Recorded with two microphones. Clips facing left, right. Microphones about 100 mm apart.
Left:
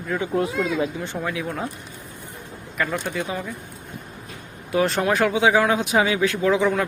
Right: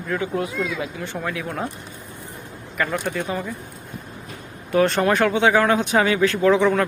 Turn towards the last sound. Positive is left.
turn(degrees=5)  # may be behind; listen again after turning